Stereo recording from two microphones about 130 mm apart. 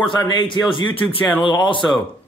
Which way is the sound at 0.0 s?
40° left (ahead or behind).